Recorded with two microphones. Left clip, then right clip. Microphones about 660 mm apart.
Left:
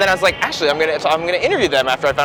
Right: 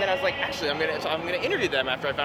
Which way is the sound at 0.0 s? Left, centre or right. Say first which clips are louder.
Left 10 dB; left.